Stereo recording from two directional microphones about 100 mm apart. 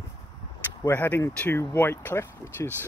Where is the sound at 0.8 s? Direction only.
20° left (ahead or behind).